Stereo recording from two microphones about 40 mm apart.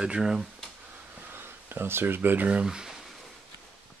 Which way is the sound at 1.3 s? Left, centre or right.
Right.